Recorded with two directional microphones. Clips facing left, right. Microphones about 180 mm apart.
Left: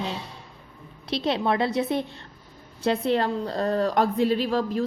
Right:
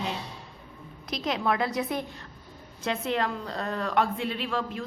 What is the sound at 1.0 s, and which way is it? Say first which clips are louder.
A woman's voice: left 4 dB; 30° left (ahead or behind).